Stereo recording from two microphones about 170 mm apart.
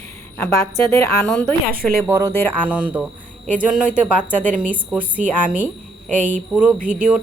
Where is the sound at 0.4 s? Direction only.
15° left (ahead or behind).